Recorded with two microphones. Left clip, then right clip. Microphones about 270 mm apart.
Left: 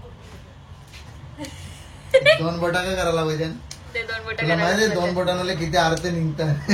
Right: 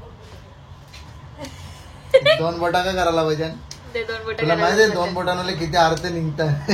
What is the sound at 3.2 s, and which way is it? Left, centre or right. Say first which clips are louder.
Speech: right 4 dB; right.